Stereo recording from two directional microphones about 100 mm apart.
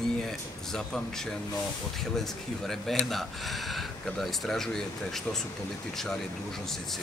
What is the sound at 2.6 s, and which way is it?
Speech, 5° left (ahead or behind).